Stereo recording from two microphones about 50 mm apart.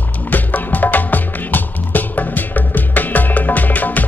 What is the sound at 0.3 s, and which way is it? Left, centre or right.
Music, left.